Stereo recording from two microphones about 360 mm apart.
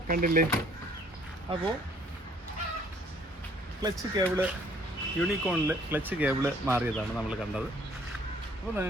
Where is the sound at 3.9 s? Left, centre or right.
Centre.